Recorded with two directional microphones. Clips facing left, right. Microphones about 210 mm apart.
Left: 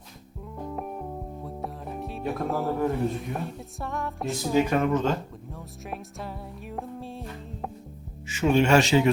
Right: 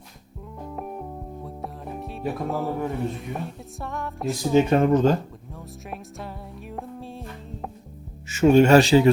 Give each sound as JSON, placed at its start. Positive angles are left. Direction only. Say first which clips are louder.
{"t": 0.6, "sound": "music", "louder": "even", "side_deg": 0}
{"t": 4.5, "sound": "speech", "louder": "right 5 dB", "side_deg": -30}
{"t": 5.5, "sound": "music", "louder": "right 1 dB", "side_deg": 0}
{"t": 8.3, "sound": "speech", "louder": "right 6 dB", "side_deg": -45}